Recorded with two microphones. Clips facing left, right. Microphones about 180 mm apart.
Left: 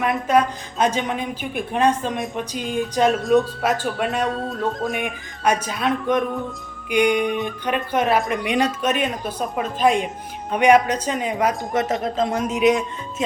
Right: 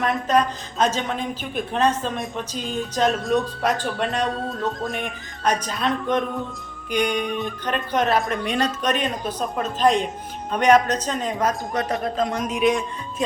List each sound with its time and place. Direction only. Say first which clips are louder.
0.0 s speech: left 2 dB; 10° left (ahead or behind)
11.7 s speech: left 2 dB; 20° left (ahead or behind)